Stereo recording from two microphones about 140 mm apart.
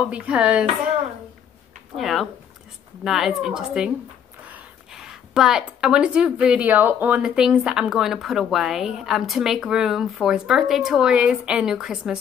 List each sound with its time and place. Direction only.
0.0 s speech: 10° right (ahead or behind)
2.0 s a woman's voice: centre (ahead or behind)